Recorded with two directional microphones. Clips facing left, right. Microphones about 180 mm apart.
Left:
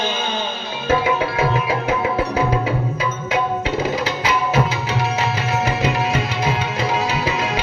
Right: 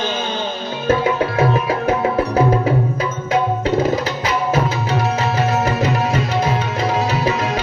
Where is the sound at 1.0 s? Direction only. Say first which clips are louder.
Right 2 dB; 45° right (ahead or behind).